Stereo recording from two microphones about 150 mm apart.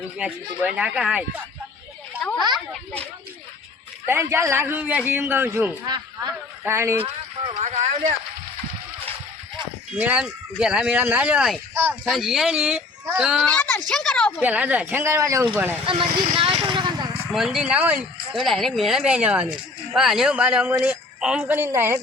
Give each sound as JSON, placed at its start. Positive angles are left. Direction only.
{"t": 0.2, "sound": "speech", "side_deg": -5}
{"t": 4.0, "sound": "a man's voice", "side_deg": -15}
{"t": 7.0, "sound": "speech", "side_deg": -40}
{"t": 10.0, "sound": "a man's voice", "side_deg": -10}
{"t": 11.7, "sound": "speech", "side_deg": -15}
{"t": 12.0, "sound": "speech", "side_deg": 0}
{"t": 13.4, "sound": "speech", "side_deg": 10}
{"t": 14.4, "sound": "a man's voice", "side_deg": -10}
{"t": 15.9, "sound": "vehicle", "side_deg": -35}
{"t": 17.3, "sound": "a man's voice", "side_deg": 0}